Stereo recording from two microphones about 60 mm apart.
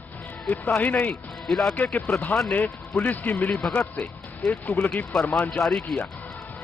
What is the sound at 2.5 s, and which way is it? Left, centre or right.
Speech, left.